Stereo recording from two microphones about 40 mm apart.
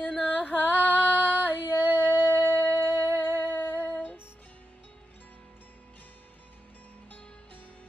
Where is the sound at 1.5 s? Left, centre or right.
Left.